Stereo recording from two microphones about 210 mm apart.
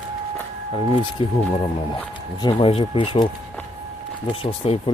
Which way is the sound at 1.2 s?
25° left (ahead or behind).